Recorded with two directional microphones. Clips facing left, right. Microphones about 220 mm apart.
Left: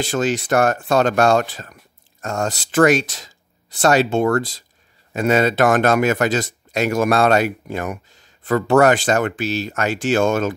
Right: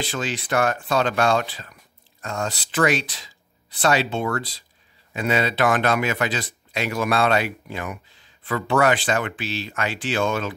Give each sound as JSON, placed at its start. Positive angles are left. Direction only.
{"t": 0.0, "sound": "speech", "side_deg": 45}